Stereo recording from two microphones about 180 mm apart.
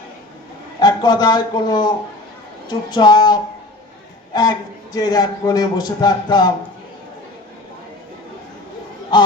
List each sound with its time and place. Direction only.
0.8 s a man's voice: 25° left (ahead or behind)
4.9 s speech: 20° left (ahead or behind)
9.1 s a sound: 25° left (ahead or behind)